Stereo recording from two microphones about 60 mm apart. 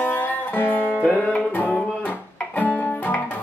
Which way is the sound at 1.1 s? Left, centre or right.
Centre.